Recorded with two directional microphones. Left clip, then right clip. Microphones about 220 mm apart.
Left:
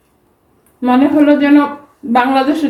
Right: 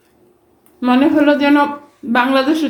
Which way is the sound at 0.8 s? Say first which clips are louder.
Left 2 dB; 30° right (ahead or behind).